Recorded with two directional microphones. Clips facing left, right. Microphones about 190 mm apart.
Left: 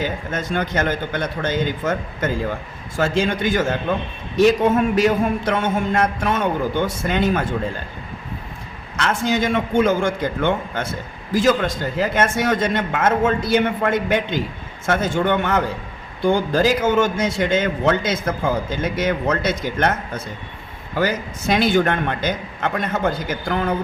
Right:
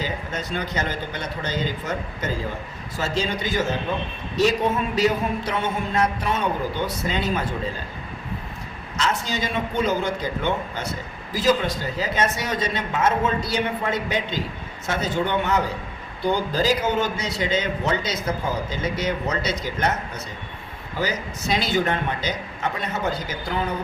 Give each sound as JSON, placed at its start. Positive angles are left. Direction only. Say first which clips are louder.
{"t": 0.0, "sound": "a man's voice", "louder": "left 4 dB", "side_deg": 50}
{"t": 9.0, "sound": "a man's voice", "louder": "left 5 dB", "side_deg": 55}